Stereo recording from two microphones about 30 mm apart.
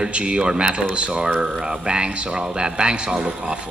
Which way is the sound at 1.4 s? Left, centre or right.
Right.